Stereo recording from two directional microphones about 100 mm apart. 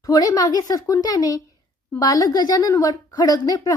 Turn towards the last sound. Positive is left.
turn(degrees=35)  # may be behind; listen again after turning